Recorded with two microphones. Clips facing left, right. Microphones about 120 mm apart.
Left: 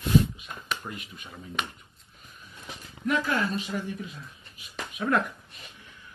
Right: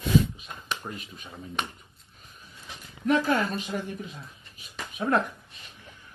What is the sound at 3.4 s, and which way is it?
A woman's voice, 45° right (ahead or behind).